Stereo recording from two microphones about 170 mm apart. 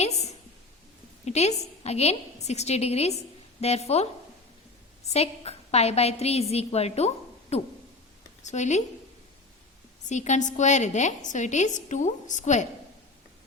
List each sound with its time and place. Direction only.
0.0 s a sound: 40° left (ahead or behind)
1.2 s a woman's voice: 40° left (ahead or behind)
5.1 s a woman's voice: 35° left (ahead or behind)
10.1 s a woman's voice: 45° left (ahead or behind)